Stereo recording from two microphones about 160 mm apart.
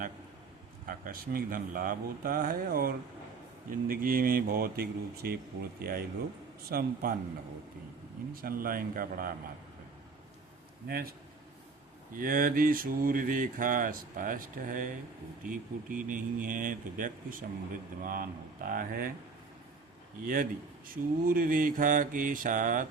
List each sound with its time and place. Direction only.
0.9 s mantra: 60° right (ahead or behind)
5.8 s speech: 70° right (ahead or behind)
6.7 s mantra: 65° right (ahead or behind)
8.3 s mantra: 65° right (ahead or behind)
10.8 s speech: 70° right (ahead or behind)
12.1 s mantra: 60° right (ahead or behind)
20.2 s mantra: 60° right (ahead or behind)